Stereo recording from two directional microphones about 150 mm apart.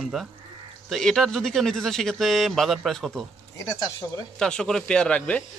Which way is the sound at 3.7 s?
25° left (ahead or behind).